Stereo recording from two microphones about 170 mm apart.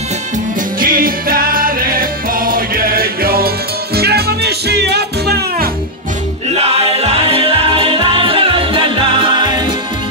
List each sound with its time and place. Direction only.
0.7 s music: 55° right (ahead or behind)
6.5 s music: 35° right (ahead or behind)